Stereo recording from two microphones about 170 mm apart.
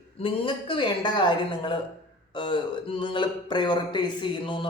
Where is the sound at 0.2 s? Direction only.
30° left (ahead or behind).